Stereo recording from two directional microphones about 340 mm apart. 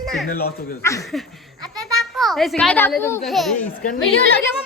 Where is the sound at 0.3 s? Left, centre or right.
Left.